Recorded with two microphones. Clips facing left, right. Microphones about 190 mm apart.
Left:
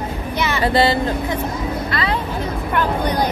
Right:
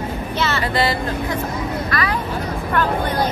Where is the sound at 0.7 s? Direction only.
25° left (ahead or behind).